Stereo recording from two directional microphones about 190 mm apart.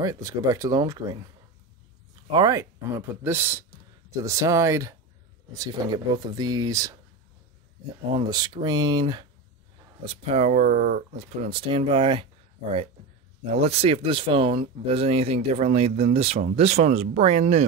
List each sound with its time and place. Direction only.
0.0 s speech: 20° right (ahead or behind)
2.3 s speech: 20° right (ahead or behind)
8.1 s speech: 25° right (ahead or behind)
10.0 s speech: 35° right (ahead or behind)
11.1 s speech: 30° right (ahead or behind)
13.6 s speech: 35° right (ahead or behind)